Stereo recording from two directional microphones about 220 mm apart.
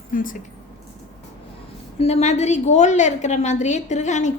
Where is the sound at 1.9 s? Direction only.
30° left (ahead or behind).